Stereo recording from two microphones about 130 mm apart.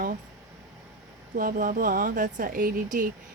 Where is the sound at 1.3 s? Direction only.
90° right.